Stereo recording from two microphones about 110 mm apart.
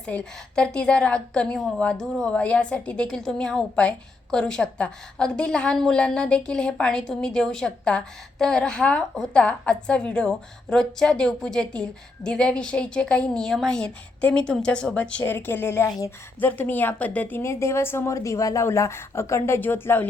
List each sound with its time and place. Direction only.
0.0 s a woman's voice: 10° left (ahead or behind)